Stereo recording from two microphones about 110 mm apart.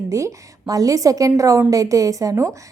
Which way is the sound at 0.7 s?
35° right (ahead or behind).